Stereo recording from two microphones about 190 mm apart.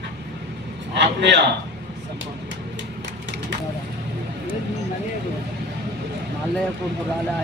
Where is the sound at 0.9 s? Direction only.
65° right (ahead or behind).